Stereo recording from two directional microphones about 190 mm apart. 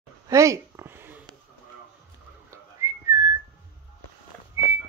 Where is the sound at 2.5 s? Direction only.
15° right (ahead or behind).